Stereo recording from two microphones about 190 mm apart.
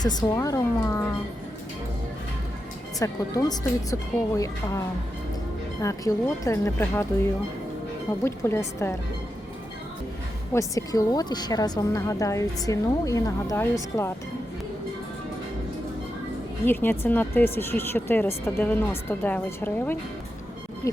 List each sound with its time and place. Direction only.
0.0 s a woman's voice: 20° left (ahead or behind)
3.0 s speech: 20° left (ahead or behind)
5.8 s a woman's voice: 15° left (ahead or behind)
8.2 s a woman's voice: 15° left (ahead or behind)
10.5 s a woman's voice: 15° left (ahead or behind)
16.6 s a woman's voice: 10° left (ahead or behind)